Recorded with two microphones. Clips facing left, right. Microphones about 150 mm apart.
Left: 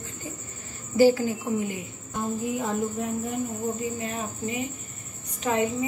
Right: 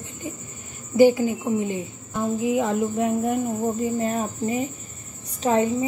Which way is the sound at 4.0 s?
40° right (ahead or behind).